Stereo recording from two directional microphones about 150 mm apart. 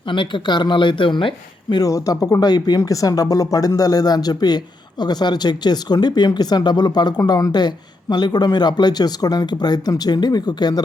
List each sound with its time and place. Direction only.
0.1 s speech: 30° left (ahead or behind)
1.7 s speech: 25° left (ahead or behind)